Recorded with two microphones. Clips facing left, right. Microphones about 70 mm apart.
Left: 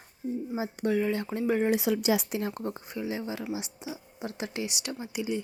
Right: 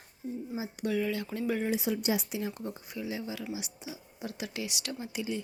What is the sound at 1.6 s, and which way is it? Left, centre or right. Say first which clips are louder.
Speech: left 5 dB; left.